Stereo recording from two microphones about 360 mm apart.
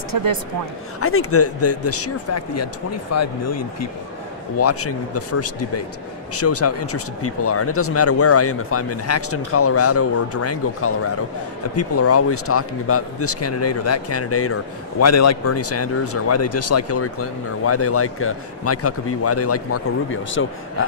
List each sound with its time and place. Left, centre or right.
0.1 s speech: right
1.0 s speech: left